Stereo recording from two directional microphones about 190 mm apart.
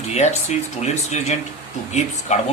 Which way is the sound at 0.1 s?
35° left (ahead or behind).